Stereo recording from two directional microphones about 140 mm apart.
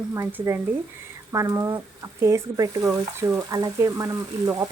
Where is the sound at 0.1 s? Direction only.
20° right (ahead or behind).